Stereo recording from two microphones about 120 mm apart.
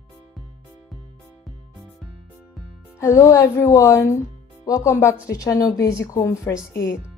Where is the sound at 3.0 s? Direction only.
25° left (ahead or behind).